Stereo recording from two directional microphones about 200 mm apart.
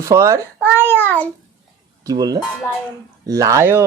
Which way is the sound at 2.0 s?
20° right (ahead or behind).